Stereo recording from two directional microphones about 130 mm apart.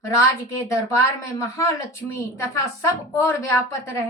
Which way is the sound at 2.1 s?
20° left (ahead or behind).